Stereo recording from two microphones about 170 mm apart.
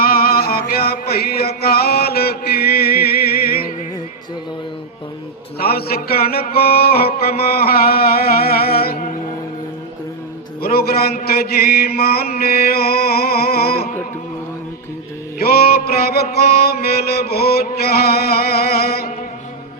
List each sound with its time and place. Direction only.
0.0 s music: 60° left (ahead or behind)
5.5 s mantra: 65° left (ahead or behind)
10.6 s mantra: 65° left (ahead or behind)
15.4 s mantra: 65° left (ahead or behind)